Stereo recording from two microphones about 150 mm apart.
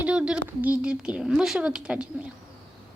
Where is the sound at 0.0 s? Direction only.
5° right (ahead or behind).